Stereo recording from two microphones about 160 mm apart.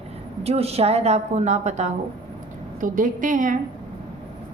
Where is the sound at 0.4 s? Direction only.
40° right (ahead or behind).